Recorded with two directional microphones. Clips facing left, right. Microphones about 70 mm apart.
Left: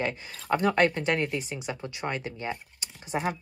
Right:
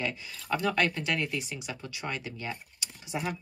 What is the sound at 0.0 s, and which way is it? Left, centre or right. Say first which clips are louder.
Speech: left 3 dB; left.